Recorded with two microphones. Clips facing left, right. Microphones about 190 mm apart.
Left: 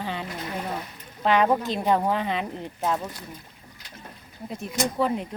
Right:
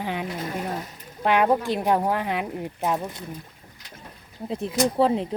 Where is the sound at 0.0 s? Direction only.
15° right (ahead or behind).